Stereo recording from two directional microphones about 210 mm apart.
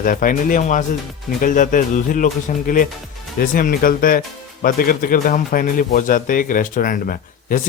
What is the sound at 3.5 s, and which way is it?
Speech, 40° left (ahead or behind).